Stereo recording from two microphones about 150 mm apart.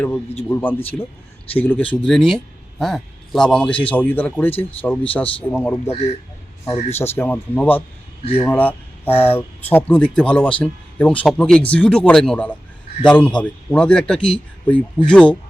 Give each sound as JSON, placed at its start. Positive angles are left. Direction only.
{"t": 0.4, "sound": "a man's voice", "side_deg": 15}
{"t": 5.9, "sound": "a man's voice", "side_deg": 45}
{"t": 6.9, "sound": "a man's voice", "side_deg": 15}